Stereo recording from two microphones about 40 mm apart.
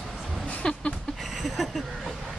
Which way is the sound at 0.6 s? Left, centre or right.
Left.